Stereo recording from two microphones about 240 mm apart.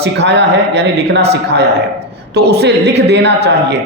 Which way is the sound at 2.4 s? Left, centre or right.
Right.